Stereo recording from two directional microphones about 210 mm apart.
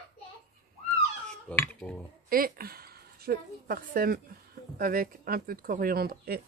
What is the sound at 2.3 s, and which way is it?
A woman's voice, 45° right (ahead or behind).